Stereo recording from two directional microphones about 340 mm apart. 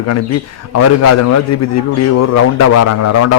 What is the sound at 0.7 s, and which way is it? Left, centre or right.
A man's voice, left.